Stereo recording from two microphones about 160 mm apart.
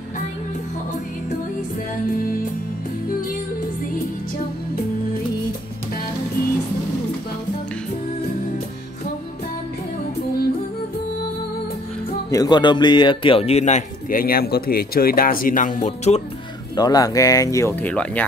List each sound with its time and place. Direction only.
12.3 s speech: 25° left (ahead or behind); by 16.2 s 45° left (ahead or behind)
16.7 s speech: 25° left (ahead or behind)